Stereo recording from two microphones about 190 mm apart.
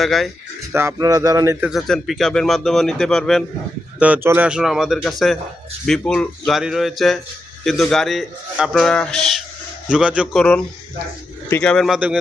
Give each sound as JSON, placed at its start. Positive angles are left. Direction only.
{"t": 0.0, "sound": "a man's voice", "side_deg": 0}
{"t": 0.7, "sound": "speech", "side_deg": -15}
{"t": 1.6, "sound": "a man's voice", "side_deg": 0}
{"t": 4.0, "sound": "a man's voice", "side_deg": -10}
{"t": 11.4, "sound": "a man's voice", "side_deg": 10}